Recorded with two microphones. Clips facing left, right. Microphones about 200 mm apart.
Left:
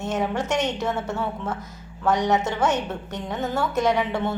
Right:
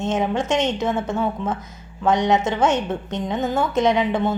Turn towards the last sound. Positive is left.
turn(degrees=-20)  # may be behind; listen again after turning